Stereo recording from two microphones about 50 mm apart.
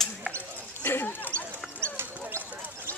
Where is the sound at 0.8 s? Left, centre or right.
Left.